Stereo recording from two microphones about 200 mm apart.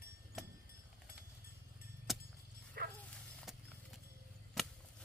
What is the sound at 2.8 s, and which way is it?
Dog, 55° right (ahead or behind).